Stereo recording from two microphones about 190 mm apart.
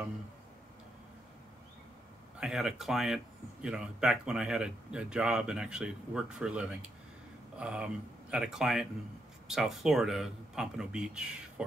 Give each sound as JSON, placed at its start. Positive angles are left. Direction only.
{"t": 2.4, "sound": "speech", "side_deg": 0}